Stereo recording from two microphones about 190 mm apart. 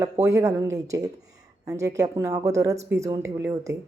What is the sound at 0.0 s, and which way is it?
A woman's voice, 15° right (ahead or behind).